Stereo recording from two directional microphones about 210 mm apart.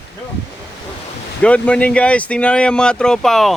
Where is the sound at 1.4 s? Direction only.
5° left (ahead or behind).